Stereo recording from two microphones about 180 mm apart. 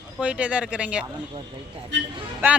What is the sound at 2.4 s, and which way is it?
Speech, 10° right (ahead or behind).